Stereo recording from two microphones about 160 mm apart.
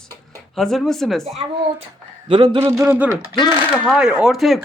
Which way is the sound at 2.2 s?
30° right (ahead or behind).